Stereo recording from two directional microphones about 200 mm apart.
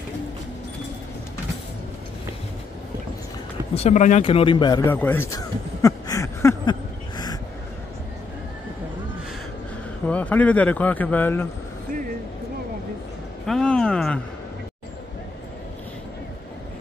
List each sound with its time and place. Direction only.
3.7 s speech: 35° left (ahead or behind)
4.8 s a sound: 10° left (ahead or behind)
10.0 s speech: 5° left (ahead or behind)
13.5 s speech: 5° left (ahead or behind)